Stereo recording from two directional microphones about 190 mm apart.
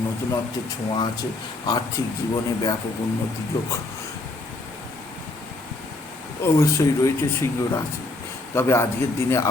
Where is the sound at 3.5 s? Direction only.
20° left (ahead or behind).